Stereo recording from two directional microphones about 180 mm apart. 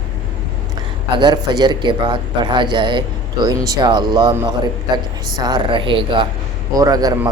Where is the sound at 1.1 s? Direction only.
25° right (ahead or behind).